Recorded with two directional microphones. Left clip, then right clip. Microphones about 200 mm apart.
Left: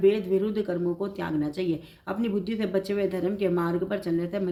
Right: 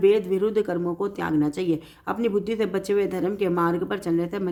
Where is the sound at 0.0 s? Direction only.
45° right (ahead or behind).